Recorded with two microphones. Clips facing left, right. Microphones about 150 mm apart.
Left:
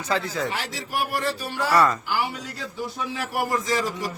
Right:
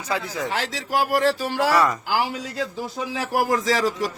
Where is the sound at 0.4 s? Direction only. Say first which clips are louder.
Right 3 dB; 90° right.